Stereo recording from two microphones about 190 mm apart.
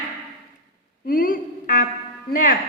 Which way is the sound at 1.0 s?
50° left (ahead or behind).